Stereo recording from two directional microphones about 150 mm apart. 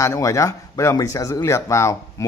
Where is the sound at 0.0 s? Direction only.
20° left (ahead or behind).